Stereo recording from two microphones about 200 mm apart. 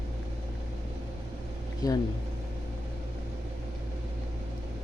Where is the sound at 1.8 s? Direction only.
20° left (ahead or behind).